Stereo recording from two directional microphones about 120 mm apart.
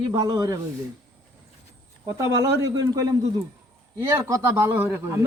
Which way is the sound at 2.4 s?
25° right (ahead or behind).